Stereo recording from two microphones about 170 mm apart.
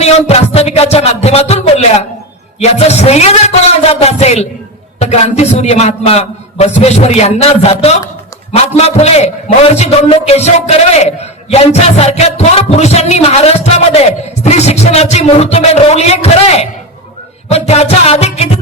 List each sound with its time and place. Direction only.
0.0 s a man's voice: 40° left (ahead or behind)